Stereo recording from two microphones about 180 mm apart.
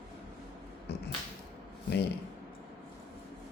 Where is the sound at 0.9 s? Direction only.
65° left (ahead or behind).